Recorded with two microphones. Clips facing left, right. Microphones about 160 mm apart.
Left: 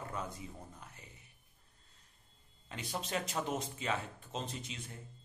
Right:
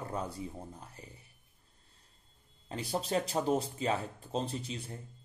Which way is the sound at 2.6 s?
35° right (ahead or behind).